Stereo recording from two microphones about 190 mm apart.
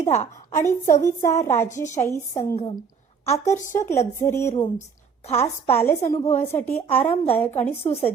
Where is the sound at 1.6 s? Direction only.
40° left (ahead or behind).